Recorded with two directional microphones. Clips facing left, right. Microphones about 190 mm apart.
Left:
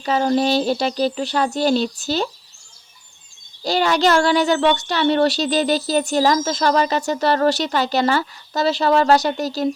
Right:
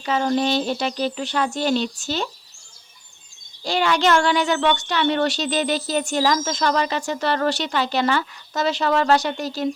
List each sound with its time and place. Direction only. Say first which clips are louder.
0.0 s a child's voice: left 3 dB; 35° left (ahead or behind)
3.6 s a child's voice: left 3 dB; 40° left (ahead or behind)